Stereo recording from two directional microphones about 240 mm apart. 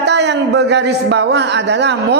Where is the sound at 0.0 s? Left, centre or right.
Right.